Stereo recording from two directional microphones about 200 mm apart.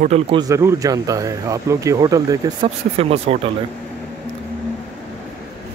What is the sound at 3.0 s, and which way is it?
Speech, 30° right (ahead or behind).